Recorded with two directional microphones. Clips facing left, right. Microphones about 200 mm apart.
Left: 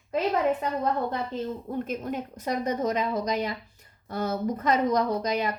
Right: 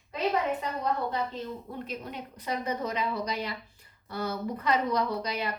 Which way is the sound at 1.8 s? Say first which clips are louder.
Left 7 dB; 50° left (ahead or behind).